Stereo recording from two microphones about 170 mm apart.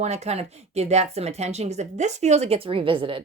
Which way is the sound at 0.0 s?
40° right (ahead or behind).